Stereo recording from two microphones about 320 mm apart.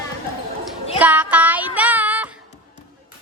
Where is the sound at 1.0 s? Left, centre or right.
Centre.